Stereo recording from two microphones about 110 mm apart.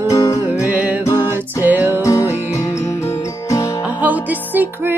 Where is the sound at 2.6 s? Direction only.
25° left (ahead or behind).